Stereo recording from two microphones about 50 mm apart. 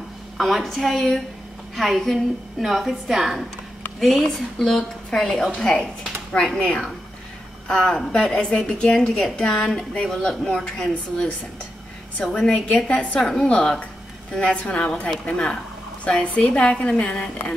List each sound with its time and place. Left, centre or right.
0.4 s a woman's voice: centre
7.7 s a woman's voice: centre
12.8 s a woman's voice: left
13.2 s a woman's voice: centre